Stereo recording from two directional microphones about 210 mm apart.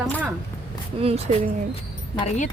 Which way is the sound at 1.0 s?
30° right (ahead or behind).